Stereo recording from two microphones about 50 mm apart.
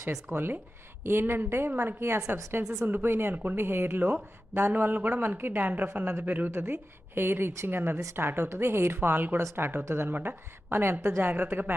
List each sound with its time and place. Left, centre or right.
0.3 s a woman's voice: right
1.5 s a woman's voice: right
1.7 s speech: right
2.0 s a woman's voice: right
6.6 s speech: right
9.0 s a woman's voice: right
11.2 s a woman's voice: right